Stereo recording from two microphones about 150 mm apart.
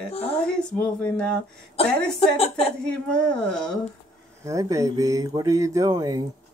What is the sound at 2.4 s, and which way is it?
Speech, 40° left (ahead or behind).